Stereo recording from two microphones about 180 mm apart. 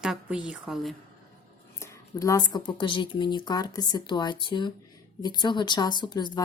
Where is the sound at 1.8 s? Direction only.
15° left (ahead or behind).